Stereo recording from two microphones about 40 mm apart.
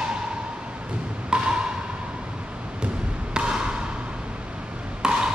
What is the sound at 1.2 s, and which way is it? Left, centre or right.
Wood block, right.